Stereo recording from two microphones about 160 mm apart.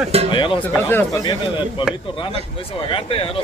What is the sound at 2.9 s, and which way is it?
Speech, 35° left (ahead or behind).